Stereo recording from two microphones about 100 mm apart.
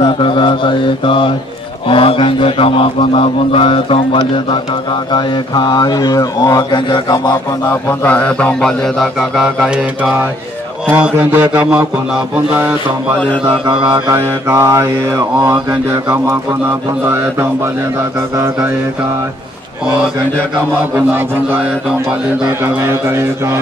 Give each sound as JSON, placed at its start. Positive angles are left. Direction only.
{"t": 0.0, "sound": "mantra", "side_deg": 60}
{"t": 1.9, "sound": "speech", "side_deg": 65}
{"t": 5.1, "sound": "speech", "side_deg": 50}
{"t": 8.0, "sound": "mantra", "side_deg": 15}
{"t": 9.4, "sound": "mantra", "side_deg": -5}
{"t": 10.9, "sound": "mantra", "side_deg": -20}
{"t": 14.1, "sound": "mantra", "side_deg": -30}
{"t": 22.8, "sound": "mantra", "side_deg": -25}